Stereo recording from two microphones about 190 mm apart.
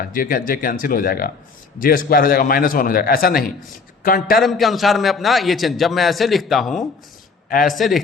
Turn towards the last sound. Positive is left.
turn(degrees=0)  # may be behind; listen again after turning